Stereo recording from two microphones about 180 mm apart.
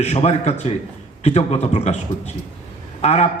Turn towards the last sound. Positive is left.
turn(degrees=35)  # may be behind; listen again after turning